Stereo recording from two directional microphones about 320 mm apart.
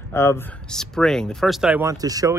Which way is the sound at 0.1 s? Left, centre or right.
Centre.